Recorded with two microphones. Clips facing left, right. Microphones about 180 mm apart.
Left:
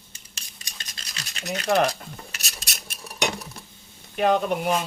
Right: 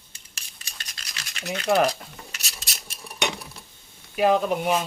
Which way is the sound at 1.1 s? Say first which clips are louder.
Left 1 dB; 30° left (ahead or behind).